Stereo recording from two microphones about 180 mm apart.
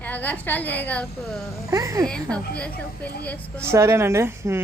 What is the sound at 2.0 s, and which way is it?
A woman's voice, 5° left (ahead or behind).